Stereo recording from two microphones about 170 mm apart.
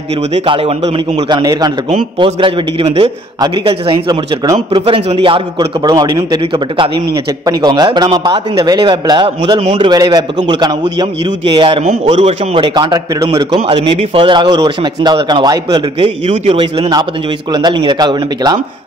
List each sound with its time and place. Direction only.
0.3 s a man's voice: 35° right (ahead or behind)
9.6 s a man's voice: 40° right (ahead or behind)
9.8 s a man's voice: 25° right (ahead or behind)